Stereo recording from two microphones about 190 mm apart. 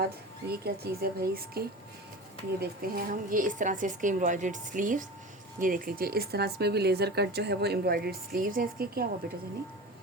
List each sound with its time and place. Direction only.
0.0 s a woman's voice: 55° right (ahead or behind)